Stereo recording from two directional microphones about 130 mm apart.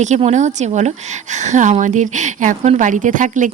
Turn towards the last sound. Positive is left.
turn(degrees=-75)  # may be behind; listen again after turning